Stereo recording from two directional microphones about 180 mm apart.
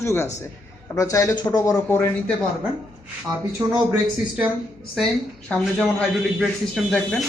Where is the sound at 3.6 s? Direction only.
15° right (ahead or behind).